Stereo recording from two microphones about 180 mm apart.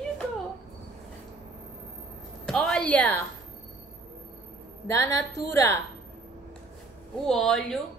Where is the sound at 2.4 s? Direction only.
5° left (ahead or behind).